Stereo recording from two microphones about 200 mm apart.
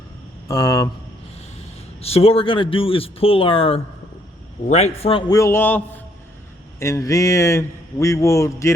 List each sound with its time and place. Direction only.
0.4 s speech: 15° left (ahead or behind)
2.0 s a man's voice: 30° left (ahead or behind)
5.3 s speech: 15° left (ahead or behind)